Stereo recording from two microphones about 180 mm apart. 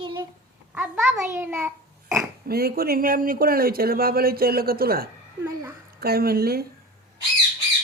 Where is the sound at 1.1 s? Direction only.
15° right (ahead or behind).